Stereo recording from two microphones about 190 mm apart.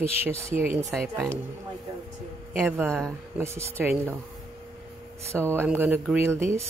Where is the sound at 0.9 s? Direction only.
Centre (ahead or behind).